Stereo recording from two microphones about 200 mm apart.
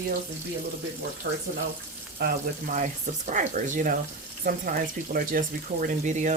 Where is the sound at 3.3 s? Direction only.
40° right (ahead or behind).